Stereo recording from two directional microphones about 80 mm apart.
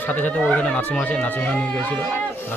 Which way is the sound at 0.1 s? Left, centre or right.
Centre.